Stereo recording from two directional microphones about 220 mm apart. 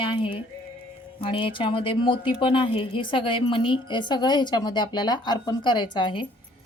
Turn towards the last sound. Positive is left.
turn(degrees=20)  # may be behind; listen again after turning